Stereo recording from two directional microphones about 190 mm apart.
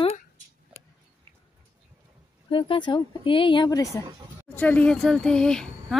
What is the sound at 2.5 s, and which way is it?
A woman's voice, 25° left (ahead or behind).